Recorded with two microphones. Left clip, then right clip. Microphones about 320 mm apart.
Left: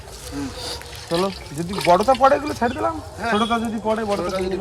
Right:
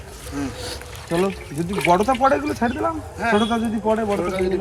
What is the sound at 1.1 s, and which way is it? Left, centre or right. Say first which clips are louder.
Speech: even; centre.